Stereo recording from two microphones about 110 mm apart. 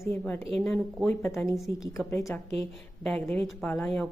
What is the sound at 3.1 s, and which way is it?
Speech, 5° left (ahead or behind).